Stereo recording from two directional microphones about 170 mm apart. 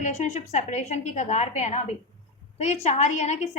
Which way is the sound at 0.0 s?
45° left (ahead or behind).